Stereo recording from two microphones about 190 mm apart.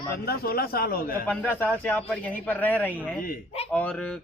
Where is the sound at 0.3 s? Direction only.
55° left (ahead or behind).